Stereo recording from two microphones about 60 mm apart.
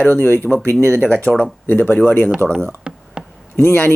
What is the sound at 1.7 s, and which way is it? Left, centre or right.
Speech, left.